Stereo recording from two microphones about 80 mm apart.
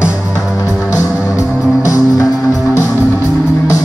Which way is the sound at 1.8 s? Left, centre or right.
Left.